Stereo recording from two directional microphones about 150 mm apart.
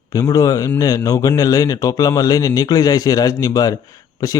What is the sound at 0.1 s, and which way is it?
A man's voice, 25° left (ahead or behind).